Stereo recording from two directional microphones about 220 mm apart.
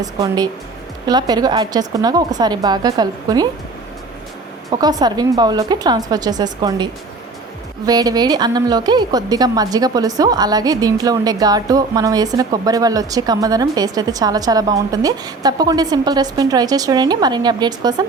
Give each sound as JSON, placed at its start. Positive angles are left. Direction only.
{"t": 0.0, "sound": "a woman's voice", "side_deg": -15}
{"t": 4.7, "sound": "a woman's voice", "side_deg": -20}